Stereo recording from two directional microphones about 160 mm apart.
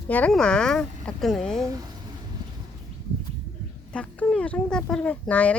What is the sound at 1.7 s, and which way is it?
Speech, 25° right (ahead or behind).